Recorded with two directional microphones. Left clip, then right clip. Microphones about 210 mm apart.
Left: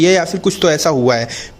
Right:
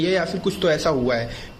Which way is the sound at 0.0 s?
45° left (ahead or behind).